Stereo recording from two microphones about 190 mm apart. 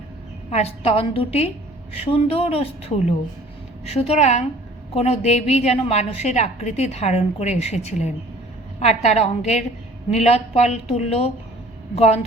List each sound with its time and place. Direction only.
0.5 s a woman's voice: 30° left (ahead or behind)
4.1 s a woman's voice: 35° left (ahead or behind)